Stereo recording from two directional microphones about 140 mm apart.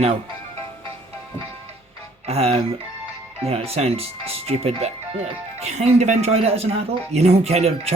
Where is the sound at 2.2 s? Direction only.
45° right (ahead or behind).